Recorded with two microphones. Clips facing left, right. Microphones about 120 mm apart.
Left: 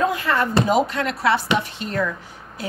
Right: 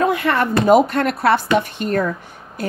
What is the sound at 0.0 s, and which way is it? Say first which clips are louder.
Speech: right 3 dB; 65° right (ahead or behind).